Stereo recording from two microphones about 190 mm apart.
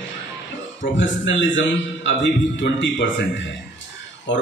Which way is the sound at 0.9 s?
75° left (ahead or behind).